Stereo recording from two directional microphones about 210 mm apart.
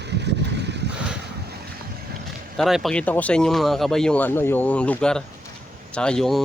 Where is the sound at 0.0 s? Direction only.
55° right (ahead or behind).